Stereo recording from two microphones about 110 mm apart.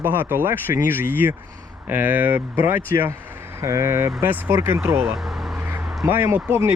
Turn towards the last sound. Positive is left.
turn(degrees=-20)  # may be behind; listen again after turning